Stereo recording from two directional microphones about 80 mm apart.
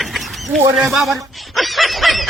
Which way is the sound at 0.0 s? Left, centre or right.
Centre.